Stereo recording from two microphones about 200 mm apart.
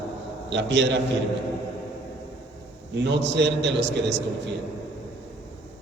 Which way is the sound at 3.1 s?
60° right (ahead or behind).